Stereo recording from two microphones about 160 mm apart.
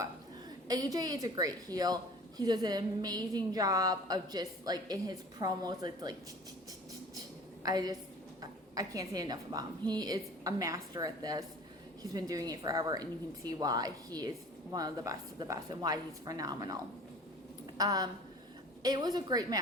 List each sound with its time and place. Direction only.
0.7 s a woman's voice: 20° right (ahead or behind)
7.6 s a woman's voice: 25° right (ahead or behind)
17.7 s a woman's voice: 25° right (ahead or behind)